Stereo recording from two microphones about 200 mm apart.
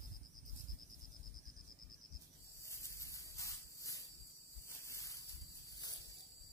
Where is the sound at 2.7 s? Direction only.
15° left (ahead or behind).